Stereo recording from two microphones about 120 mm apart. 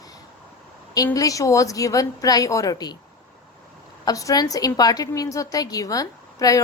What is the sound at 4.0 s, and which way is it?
A woman's voice, 30° left (ahead or behind).